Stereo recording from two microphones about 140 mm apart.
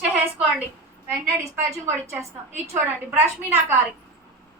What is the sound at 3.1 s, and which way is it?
Speech, 15° right (ahead or behind).